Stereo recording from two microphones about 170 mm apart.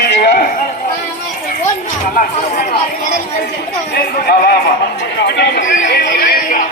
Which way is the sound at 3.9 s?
65° left (ahead or behind).